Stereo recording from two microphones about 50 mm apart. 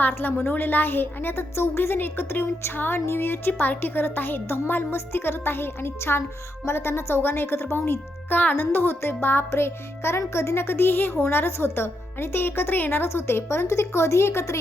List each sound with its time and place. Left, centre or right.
0.1 s a woman's voice: left
8.4 s a woman's voice: left
13.7 s speech: left